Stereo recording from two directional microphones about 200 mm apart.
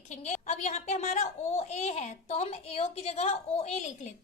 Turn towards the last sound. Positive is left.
turn(degrees=35)  # may be behind; listen again after turning